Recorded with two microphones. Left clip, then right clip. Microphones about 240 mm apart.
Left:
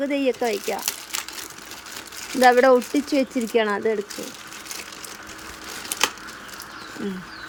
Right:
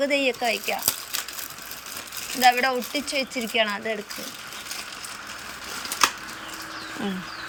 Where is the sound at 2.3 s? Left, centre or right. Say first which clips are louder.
Left 5 dB; left.